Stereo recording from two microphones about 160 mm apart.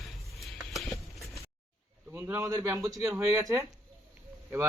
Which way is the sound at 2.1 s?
15° right (ahead or behind).